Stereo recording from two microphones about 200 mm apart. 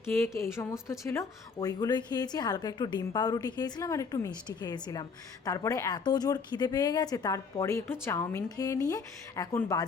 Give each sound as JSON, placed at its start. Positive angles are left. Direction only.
{"t": 0.1, "sound": "a woman's voice", "side_deg": 15}